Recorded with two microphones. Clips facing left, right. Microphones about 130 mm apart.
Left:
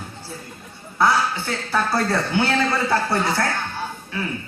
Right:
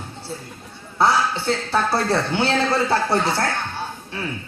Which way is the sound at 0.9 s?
25° right (ahead or behind).